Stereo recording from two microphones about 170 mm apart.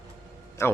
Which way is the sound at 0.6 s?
15° left (ahead or behind).